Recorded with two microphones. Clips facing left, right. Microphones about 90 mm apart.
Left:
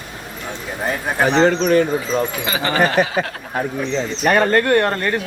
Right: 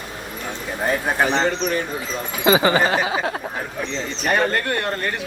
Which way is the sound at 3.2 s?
65° left (ahead or behind).